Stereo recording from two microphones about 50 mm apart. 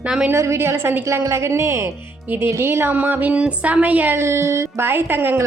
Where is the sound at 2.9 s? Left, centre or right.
Right.